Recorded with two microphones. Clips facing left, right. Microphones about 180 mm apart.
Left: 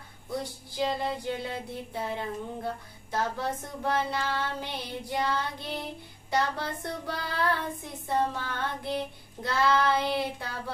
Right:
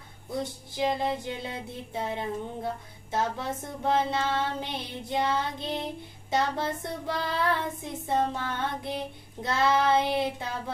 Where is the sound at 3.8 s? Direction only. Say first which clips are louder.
Right 3 dB; 20° right (ahead or behind).